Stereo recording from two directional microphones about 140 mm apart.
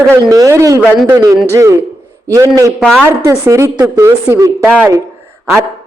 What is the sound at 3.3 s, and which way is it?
A woman's voice, 20° right (ahead or behind).